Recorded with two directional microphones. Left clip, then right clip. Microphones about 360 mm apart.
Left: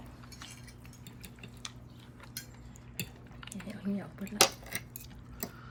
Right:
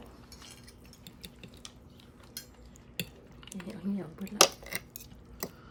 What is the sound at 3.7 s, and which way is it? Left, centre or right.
Speech, right.